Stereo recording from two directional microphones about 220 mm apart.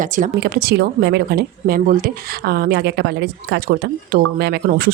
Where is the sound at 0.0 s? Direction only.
35° right (ahead or behind).